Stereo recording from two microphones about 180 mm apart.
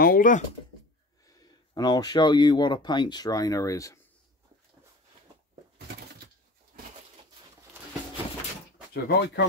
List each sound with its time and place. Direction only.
0.0 s speech: 50° left (ahead or behind)
1.2 s speech: 20° left (ahead or behind)
8.9 s speech: 65° left (ahead or behind)